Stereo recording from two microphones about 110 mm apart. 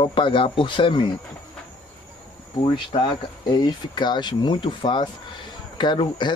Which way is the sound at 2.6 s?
45° left (ahead or behind).